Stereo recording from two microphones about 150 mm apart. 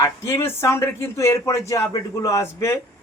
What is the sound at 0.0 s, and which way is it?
A man's voice, 20° left (ahead or behind).